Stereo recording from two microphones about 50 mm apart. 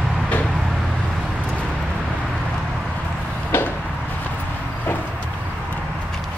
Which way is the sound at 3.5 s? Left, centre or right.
Left.